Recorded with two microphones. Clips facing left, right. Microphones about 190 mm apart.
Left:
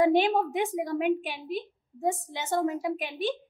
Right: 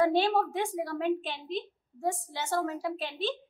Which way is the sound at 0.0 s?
15° left (ahead or behind).